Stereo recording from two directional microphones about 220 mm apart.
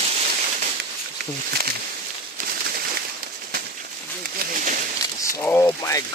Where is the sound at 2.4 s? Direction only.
45° right (ahead or behind).